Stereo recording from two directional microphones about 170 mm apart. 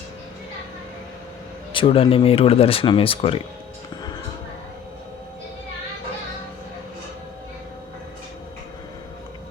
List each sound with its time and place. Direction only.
1.7 s speech: 30° left (ahead or behind)